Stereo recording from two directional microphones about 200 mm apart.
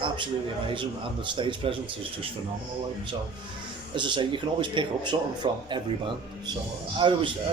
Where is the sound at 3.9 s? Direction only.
25° right (ahead or behind).